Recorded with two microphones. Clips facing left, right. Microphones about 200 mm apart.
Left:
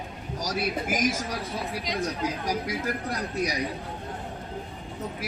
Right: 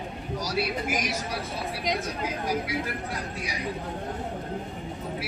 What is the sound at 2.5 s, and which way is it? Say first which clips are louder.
Speech: even; 40° left (ahead or behind).